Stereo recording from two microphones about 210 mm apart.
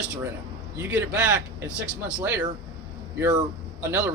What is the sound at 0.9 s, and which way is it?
Speech, 10° right (ahead or behind).